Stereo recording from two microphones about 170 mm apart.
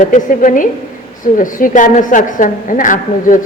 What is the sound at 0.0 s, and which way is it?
A woman's voice, 50° left (ahead or behind).